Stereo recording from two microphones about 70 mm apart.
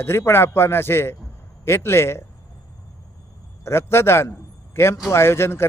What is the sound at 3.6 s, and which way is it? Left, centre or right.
A man's voice, left.